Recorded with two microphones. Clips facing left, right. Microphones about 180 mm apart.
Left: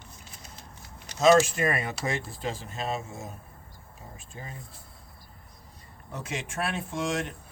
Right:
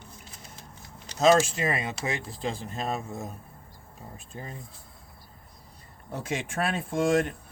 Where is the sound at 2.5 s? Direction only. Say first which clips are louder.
Right 1 dB; 35° right (ahead or behind).